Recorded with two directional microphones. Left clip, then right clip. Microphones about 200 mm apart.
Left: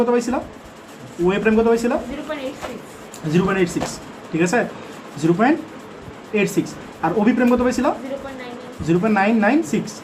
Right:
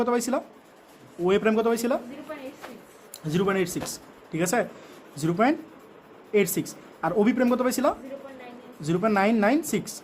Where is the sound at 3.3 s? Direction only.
55° right (ahead or behind).